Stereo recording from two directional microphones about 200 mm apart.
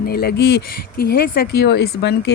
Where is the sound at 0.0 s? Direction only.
50° left (ahead or behind).